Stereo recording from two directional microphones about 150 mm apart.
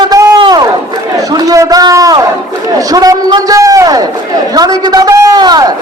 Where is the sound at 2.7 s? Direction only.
25° right (ahead or behind).